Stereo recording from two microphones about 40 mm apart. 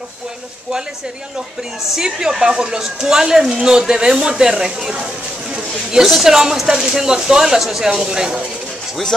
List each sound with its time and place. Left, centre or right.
2.1 s speech: centre
4.8 s a woman's voice: right